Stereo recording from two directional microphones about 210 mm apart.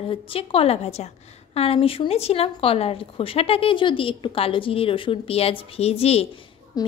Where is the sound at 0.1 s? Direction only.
25° left (ahead or behind).